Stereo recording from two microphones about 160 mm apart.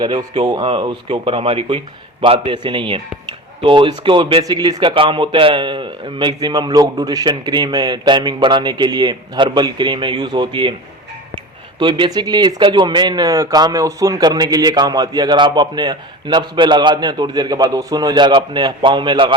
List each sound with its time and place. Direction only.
0.0 s speech: 30° right (ahead or behind)
11.8 s speech: 30° right (ahead or behind)